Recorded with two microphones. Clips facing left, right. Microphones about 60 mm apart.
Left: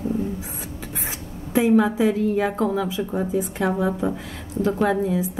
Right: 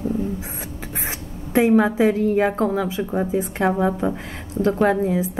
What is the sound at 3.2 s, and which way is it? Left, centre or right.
Speech, right.